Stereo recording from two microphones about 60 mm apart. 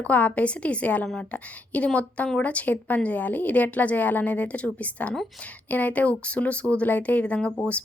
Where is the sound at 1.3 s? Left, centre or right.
Left.